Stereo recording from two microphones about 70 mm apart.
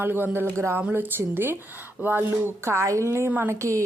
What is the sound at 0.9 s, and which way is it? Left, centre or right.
A woman's voice, right.